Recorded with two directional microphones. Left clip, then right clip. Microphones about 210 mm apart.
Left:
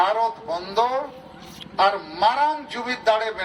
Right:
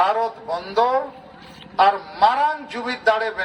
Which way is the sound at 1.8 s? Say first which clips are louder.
Right 4 dB; 30° right (ahead or behind).